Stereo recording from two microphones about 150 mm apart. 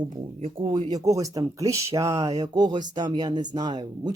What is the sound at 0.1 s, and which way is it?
Speech, 50° right (ahead or behind).